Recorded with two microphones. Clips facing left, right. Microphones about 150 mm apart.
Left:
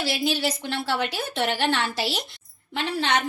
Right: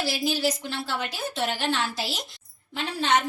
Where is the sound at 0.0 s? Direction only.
65° left (ahead or behind).